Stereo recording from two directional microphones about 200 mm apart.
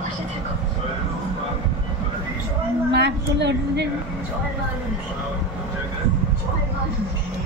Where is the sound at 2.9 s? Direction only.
60° right (ahead or behind).